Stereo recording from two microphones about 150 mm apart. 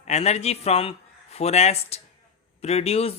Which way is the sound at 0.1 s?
45° left (ahead or behind).